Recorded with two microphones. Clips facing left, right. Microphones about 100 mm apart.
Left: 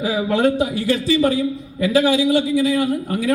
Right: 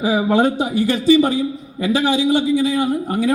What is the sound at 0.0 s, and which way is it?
A man's voice, 20° right (ahead or behind).